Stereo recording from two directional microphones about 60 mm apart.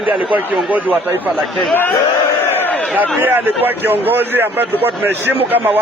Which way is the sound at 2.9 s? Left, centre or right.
Right.